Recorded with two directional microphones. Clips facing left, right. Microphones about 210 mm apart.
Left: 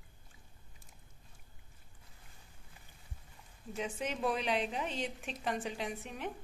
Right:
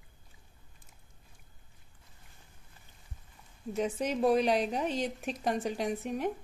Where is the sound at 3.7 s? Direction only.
40° right (ahead or behind).